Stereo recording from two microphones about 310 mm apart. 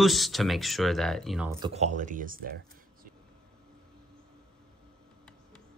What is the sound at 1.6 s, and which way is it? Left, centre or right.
Speech, right.